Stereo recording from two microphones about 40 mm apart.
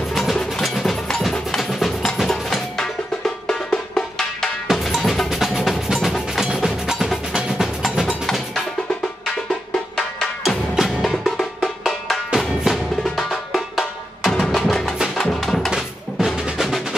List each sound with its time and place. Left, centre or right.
0.1 s music: centre
2.2 s music: centre
4.6 s drum: centre
5.3 s music: centre
9.9 s percussion: centre
12.4 s percussion: centre
13.0 s music: centre
16.3 s music: centre